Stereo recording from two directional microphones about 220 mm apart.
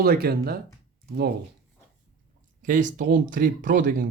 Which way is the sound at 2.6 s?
35° right (ahead or behind).